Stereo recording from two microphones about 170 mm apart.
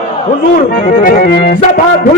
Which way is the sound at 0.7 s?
55° left (ahead or behind).